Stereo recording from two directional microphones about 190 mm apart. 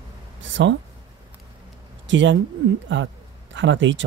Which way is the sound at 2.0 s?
75° right (ahead or behind).